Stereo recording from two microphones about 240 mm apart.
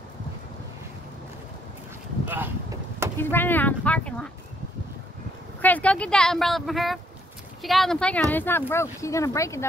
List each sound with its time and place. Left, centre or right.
2.2 s a sound: centre
3.2 s speech: centre
5.6 s speech: centre